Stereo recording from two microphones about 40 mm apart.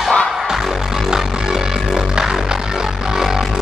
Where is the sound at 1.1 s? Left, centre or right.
Centre.